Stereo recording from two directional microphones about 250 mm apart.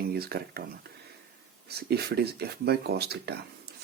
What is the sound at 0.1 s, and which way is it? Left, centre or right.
Speech, right.